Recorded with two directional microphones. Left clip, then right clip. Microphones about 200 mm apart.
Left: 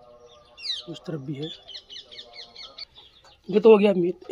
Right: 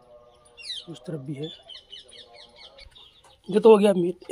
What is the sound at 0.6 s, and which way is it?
Bird, 20° left (ahead or behind).